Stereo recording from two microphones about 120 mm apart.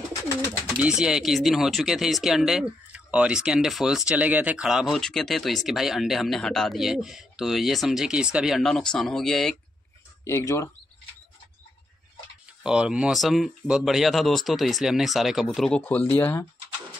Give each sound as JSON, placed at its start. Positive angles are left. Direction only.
{"t": 0.7, "sound": "speech", "side_deg": -5}
{"t": 10.2, "sound": "speech", "side_deg": 20}
{"t": 12.6, "sound": "speech", "side_deg": -5}